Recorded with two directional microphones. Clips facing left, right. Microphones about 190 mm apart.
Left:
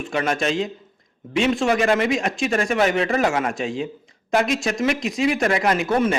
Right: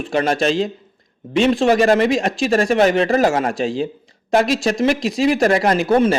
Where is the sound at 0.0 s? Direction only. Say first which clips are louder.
Right 5 dB; 35° right (ahead or behind).